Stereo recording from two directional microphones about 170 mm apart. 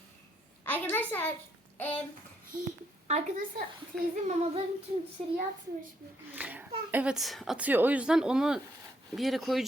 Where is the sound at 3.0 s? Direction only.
45° right (ahead or behind).